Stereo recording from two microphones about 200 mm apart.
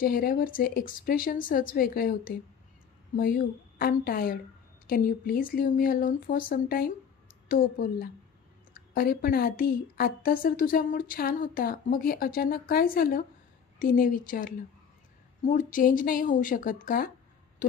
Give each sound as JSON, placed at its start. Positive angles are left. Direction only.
{"t": 0.0, "sound": "a woman's voice", "side_deg": 45}